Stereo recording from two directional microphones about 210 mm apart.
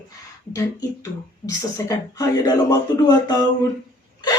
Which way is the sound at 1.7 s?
15° left (ahead or behind).